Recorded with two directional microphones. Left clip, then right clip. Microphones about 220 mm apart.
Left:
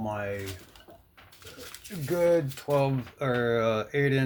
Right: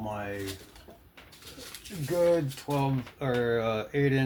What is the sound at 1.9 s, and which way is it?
Speech, 50° left (ahead or behind).